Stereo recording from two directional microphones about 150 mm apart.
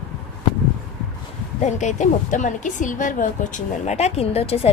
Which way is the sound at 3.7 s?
50° left (ahead or behind).